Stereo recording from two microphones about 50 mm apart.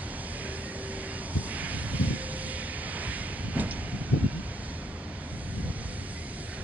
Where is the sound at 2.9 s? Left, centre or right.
Right.